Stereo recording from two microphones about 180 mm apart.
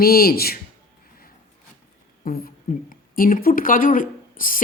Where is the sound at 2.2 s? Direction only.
55° left (ahead or behind).